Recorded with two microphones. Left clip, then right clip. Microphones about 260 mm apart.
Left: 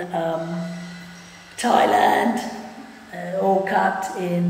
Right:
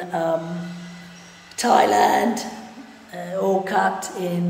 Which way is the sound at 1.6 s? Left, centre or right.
Centre.